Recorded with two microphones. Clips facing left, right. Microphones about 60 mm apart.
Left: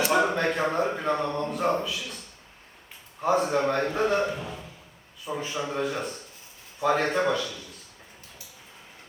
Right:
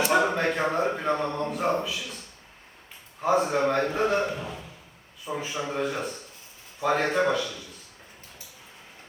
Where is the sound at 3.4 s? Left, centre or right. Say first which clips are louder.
Right 1 dB; centre.